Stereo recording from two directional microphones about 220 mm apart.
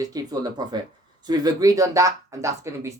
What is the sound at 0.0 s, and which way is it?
Speech, 15° right (ahead or behind).